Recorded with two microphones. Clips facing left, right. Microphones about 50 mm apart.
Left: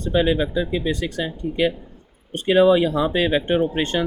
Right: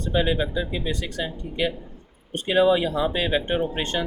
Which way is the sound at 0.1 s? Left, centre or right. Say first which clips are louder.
Left 4 dB; left.